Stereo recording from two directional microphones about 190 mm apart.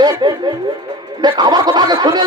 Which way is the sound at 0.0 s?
20° right (ahead or behind).